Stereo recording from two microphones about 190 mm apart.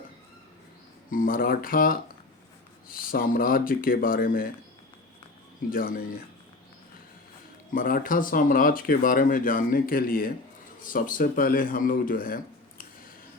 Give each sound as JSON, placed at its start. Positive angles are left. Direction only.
{"t": 1.1, "sound": "speech", "side_deg": 45}
{"t": 5.7, "sound": "speech", "side_deg": 45}
{"t": 7.7, "sound": "speech", "side_deg": 45}